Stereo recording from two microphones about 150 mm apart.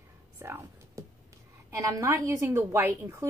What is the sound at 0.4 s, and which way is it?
A woman's voice, 15° right (ahead or behind).